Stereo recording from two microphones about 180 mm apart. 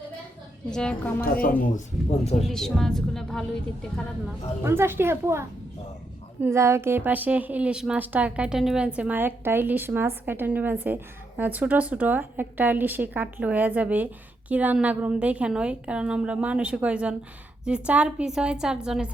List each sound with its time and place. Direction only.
0.7 s a woman's voice: 5° left (ahead or behind)
1.2 s speech: 50° left (ahead or behind)
1.6 s speech: 40° left (ahead or behind)
2.5 s a woman's voice: centre (ahead or behind)
4.6 s a woman's voice: 15° right (ahead or behind)